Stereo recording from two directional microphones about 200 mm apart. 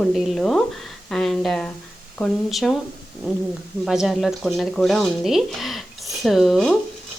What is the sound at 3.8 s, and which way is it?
Speech, centre (ahead or behind).